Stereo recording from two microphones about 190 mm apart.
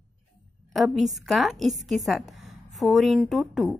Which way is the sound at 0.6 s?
Centre (ahead or behind).